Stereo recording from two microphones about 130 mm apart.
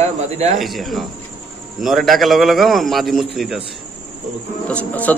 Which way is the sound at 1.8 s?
Centre (ahead or behind).